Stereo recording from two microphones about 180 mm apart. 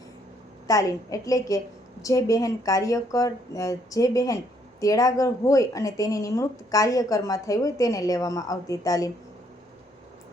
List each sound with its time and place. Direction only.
0.7 s speech: 20° left (ahead or behind)